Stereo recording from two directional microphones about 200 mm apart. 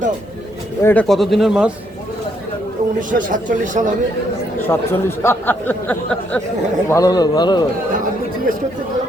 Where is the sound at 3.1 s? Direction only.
40° right (ahead or behind).